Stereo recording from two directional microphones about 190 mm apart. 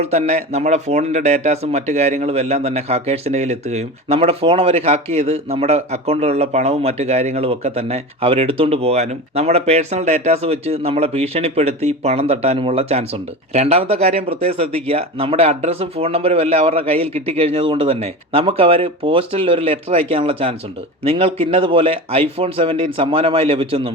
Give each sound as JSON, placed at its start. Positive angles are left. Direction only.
{"t": 0.0, "sound": "speech", "side_deg": -35}